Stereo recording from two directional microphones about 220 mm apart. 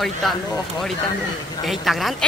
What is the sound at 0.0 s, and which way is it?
A woman's voice, centre (ahead or behind).